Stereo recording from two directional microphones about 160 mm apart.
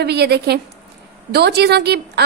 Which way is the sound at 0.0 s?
90° right.